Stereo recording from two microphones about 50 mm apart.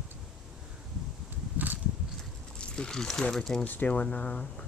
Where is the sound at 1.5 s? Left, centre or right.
Right.